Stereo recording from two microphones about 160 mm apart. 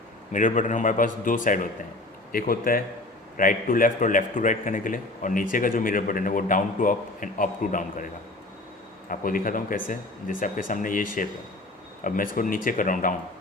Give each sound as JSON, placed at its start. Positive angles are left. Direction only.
{"t": 0.3, "sound": "a man's voice", "side_deg": 50}
{"t": 9.0, "sound": "a man's voice", "side_deg": 60}